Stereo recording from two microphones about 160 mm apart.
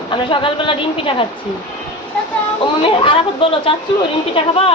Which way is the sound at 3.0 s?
35° left (ahead or behind).